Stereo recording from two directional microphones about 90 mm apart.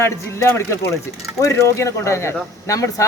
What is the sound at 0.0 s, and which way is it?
Speech, 30° left (ahead or behind).